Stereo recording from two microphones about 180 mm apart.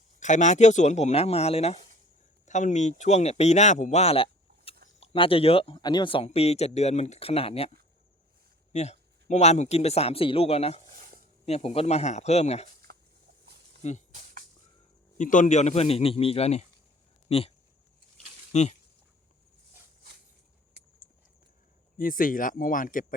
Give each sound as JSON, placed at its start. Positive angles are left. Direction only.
{"t": 0.2, "sound": "speech", "side_deg": 45}
{"t": 8.7, "sound": "speech", "side_deg": 40}
{"t": 13.8, "sound": "speech", "side_deg": 40}
{"t": 15.2, "sound": "speech", "side_deg": 45}
{"t": 18.5, "sound": "speech", "side_deg": 40}
{"t": 21.9, "sound": "speech", "side_deg": 50}